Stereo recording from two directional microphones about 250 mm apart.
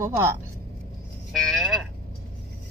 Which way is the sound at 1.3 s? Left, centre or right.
Centre.